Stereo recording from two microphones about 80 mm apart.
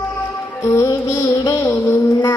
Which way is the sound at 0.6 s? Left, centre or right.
Left.